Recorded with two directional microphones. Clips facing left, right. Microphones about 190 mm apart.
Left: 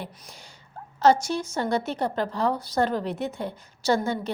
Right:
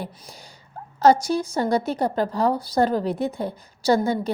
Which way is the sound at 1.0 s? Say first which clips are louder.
Right 3 dB; 35° right (ahead or behind).